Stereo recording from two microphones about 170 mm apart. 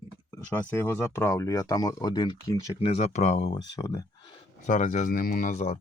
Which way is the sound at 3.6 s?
20° left (ahead or behind).